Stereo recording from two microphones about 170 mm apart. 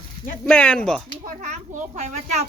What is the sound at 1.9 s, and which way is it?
Speech, 40° right (ahead or behind).